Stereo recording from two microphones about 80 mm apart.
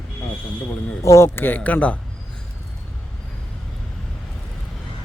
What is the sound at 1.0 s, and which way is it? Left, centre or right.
Speech, left.